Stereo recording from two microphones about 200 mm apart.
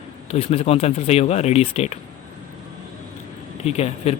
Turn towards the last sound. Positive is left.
turn(degrees=30)  # may be behind; listen again after turning